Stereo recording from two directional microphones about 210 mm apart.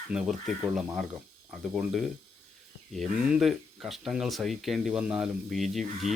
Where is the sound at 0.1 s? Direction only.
Centre (ahead or behind).